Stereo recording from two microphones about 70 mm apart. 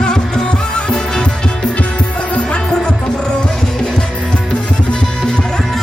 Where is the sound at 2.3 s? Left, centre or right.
Centre.